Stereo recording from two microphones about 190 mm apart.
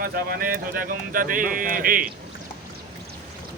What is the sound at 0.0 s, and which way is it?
Speech, 50° right (ahead or behind).